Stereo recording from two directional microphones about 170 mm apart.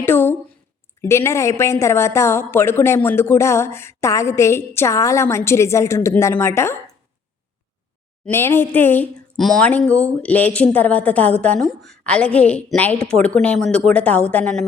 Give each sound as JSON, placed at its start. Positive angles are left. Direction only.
{"t": 0.0, "sound": "a sound", "side_deg": 10}
{"t": 1.0, "sound": "a woman's voice", "side_deg": 15}
{"t": 8.2, "sound": "a woman's voice", "side_deg": 15}